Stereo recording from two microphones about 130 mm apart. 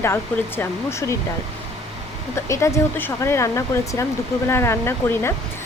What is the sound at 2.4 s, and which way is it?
Speech, 20° left (ahead or behind).